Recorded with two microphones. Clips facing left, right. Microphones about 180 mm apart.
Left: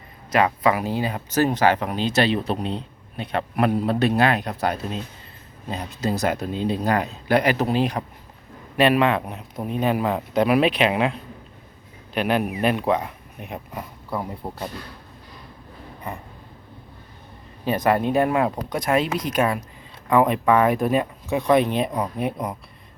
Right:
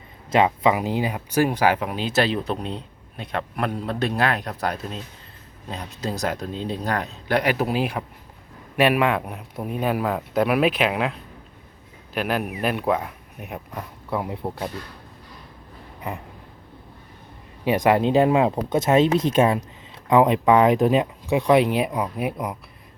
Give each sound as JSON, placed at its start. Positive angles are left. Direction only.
{"t": 0.3, "sound": "a man's voice", "side_deg": -25}
{"t": 17.7, "sound": "speech", "side_deg": -15}
{"t": 20.1, "sound": "speech", "side_deg": -15}